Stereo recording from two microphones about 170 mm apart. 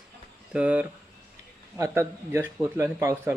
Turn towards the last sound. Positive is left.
turn(degrees=-15)  # may be behind; listen again after turning